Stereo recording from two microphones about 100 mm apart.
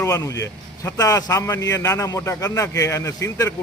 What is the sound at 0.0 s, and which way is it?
A man's voice, 30° left (ahead or behind).